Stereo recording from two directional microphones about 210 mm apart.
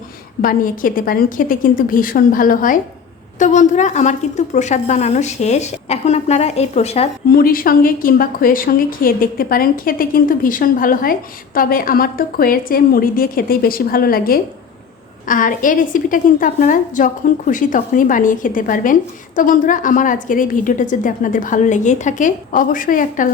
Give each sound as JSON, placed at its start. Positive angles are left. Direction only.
{"t": 0.4, "sound": "a woman's voice", "side_deg": 40}
{"t": 7.3, "sound": "a woman's voice", "side_deg": 45}